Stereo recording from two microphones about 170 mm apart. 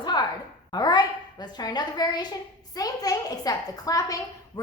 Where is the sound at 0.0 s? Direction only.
25° left (ahead or behind).